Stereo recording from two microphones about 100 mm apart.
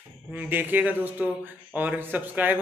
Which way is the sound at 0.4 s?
20° right (ahead or behind).